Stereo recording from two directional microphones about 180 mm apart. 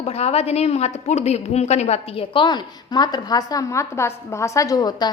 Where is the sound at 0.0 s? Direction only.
35° left (ahead or behind).